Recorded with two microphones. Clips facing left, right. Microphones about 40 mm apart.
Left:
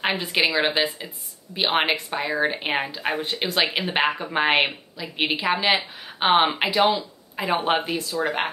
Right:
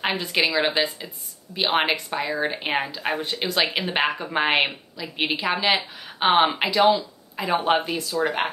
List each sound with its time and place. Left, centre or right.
0.0 s speech: centre
6.8 s speech: left